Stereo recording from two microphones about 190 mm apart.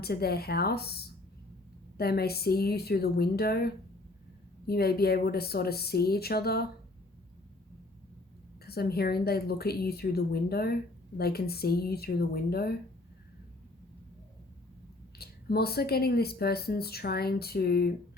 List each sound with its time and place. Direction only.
0.0 s speech: 55° left (ahead or behind)
8.6 s speech: 55° left (ahead or behind)
15.2 s speech: 55° left (ahead or behind)